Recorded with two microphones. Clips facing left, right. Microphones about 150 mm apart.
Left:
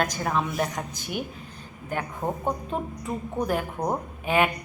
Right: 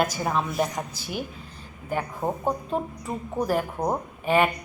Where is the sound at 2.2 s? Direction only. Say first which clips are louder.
Right 1 dB; 5° right (ahead or behind).